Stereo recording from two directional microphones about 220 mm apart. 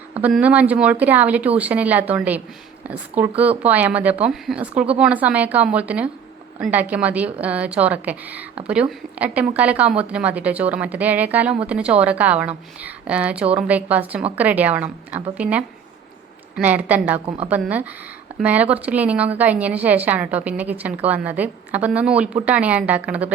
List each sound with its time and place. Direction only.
0.2 s a woman's voice: 5° right (ahead or behind)
17.2 s a woman's voice: 25° right (ahead or behind)
17.5 s a woman's voice: 5° right (ahead or behind)